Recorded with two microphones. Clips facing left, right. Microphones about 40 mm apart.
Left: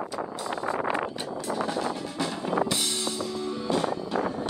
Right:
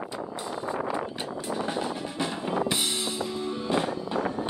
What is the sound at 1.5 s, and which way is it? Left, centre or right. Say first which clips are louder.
Music: left 2 dB; right.